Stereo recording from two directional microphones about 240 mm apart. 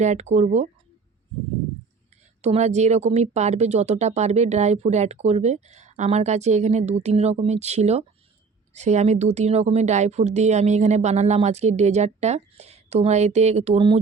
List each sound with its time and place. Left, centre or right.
0.0 s speech: right
2.4 s speech: right